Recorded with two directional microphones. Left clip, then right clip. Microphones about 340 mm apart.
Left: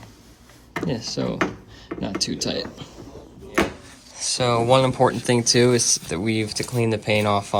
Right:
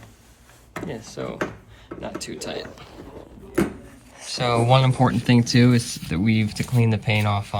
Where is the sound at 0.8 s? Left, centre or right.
Centre.